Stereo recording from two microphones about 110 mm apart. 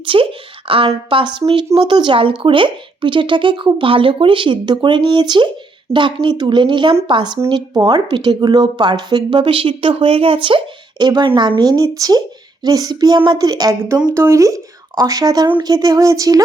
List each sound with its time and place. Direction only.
0.0 s a woman's voice: 50° right (ahead or behind); by 13.7 s 35° right (ahead or behind)
14.1 s speech: 25° right (ahead or behind)
15.4 s a woman's voice: 50° right (ahead or behind)
15.7 s speech: 35° right (ahead or behind)